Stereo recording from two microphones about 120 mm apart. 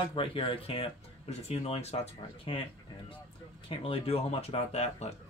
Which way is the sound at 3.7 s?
50° left (ahead or behind).